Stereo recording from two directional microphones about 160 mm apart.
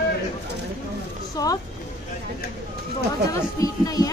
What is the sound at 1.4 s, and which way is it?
Speech, 20° left (ahead or behind).